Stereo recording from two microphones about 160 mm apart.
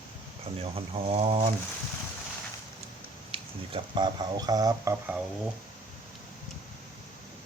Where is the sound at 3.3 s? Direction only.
35° right (ahead or behind); by 5.1 s 20° right (ahead or behind).